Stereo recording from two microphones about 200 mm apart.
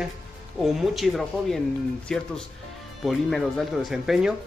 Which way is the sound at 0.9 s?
Centre (ahead or behind).